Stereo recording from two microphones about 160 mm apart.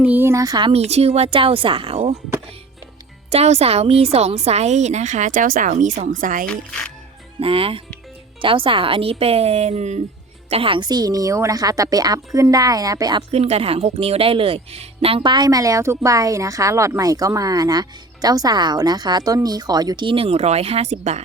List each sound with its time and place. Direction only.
0.0 s speech: 10° right (ahead or behind)
0.7 s speech: 40° right (ahead or behind)
3.2 s speech: 40° right (ahead or behind)
6.5 s a child's voice: 5° left (ahead or behind)
7.3 s speech: 35° right (ahead or behind)
10.5 s a woman's voice: 35° right (ahead or behind)
13.3 s a woman's voice: 40° right (ahead or behind)